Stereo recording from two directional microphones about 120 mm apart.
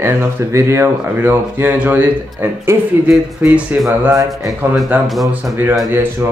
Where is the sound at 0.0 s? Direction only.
25° right (ahead or behind).